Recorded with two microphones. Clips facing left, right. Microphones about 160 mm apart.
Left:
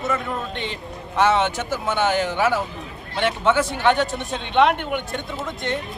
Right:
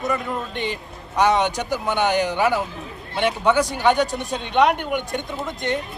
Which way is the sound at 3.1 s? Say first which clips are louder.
Right 1 dB; centre (ahead or behind).